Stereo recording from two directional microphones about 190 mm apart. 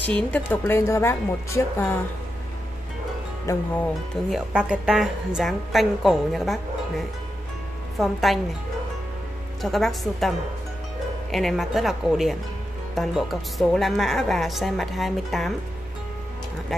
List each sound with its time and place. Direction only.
0.0 s a woman's voice: 10° left (ahead or behind)
3.5 s a woman's voice: 15° left (ahead or behind)
4.3 s a woman's voice: 5° right (ahead or behind)
8.0 s a woman's voice: centre (ahead or behind)
9.6 s a woman's voice: centre (ahead or behind)
11.3 s a woman's voice: centre (ahead or behind)